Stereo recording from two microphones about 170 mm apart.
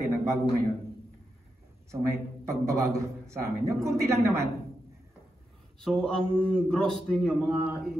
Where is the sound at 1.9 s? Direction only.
15° right (ahead or behind).